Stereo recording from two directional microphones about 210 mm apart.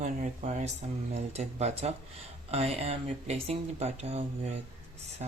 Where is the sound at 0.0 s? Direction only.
35° right (ahead or behind).